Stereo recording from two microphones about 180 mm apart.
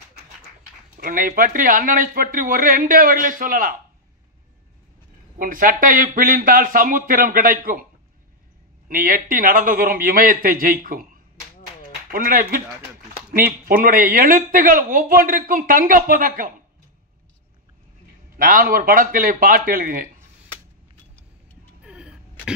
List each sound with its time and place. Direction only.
0.9 s speech: 50° right (ahead or behind)
5.4 s speech: 50° right (ahead or behind)
8.8 s speech: 50° right (ahead or behind)
12.1 s speech: 50° right (ahead or behind)
18.4 s speech: 55° right (ahead or behind)
21.8 s a sound: 5° right (ahead or behind)